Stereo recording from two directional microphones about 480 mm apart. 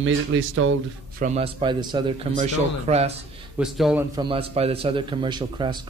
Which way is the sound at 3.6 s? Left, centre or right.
Centre.